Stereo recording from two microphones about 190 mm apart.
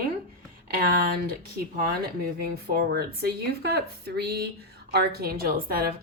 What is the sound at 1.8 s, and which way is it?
Speech, 55° right (ahead or behind).